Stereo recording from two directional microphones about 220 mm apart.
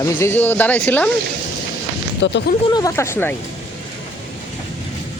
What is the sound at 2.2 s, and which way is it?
Speech, 55° left (ahead or behind).